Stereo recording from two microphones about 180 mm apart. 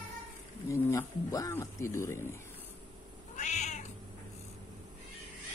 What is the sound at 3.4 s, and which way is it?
Cat, 40° left (ahead or behind).